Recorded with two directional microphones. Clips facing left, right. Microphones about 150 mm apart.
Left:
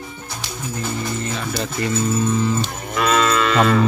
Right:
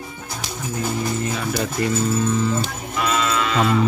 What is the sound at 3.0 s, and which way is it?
Moo, 75° left (ahead or behind).